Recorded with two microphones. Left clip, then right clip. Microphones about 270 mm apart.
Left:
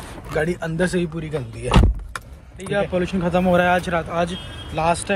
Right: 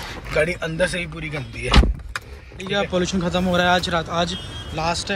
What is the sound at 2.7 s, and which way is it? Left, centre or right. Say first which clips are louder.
A man's voice: even; centre.